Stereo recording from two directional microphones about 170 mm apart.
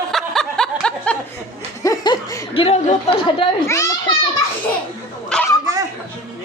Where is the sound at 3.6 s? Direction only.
20° left (ahead or behind).